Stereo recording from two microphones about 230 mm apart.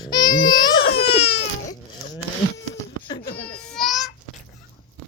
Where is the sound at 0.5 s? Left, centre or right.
Left.